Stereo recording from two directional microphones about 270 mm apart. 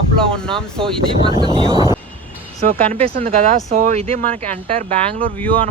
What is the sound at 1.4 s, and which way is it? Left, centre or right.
Speech, centre.